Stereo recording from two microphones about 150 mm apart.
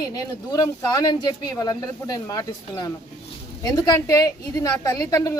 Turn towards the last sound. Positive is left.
turn(degrees=25)  # may be behind; listen again after turning